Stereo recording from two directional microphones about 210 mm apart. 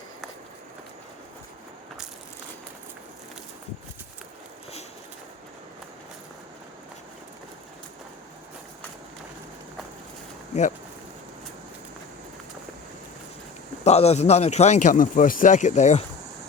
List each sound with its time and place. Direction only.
13.8 s a man's voice: 30° left (ahead or behind)